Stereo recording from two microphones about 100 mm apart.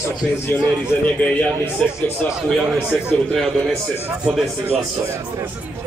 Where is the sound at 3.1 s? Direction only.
10° left (ahead or behind).